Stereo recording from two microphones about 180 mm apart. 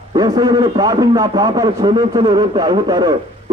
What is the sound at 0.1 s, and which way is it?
A man's voice, 20° right (ahead or behind).